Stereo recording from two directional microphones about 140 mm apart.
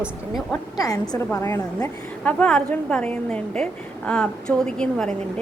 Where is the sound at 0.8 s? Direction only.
25° left (ahead or behind).